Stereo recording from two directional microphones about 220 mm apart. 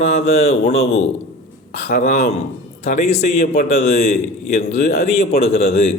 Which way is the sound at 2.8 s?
30° left (ahead or behind).